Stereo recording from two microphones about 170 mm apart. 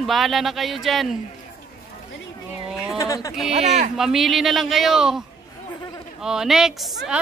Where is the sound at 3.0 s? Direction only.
20° left (ahead or behind).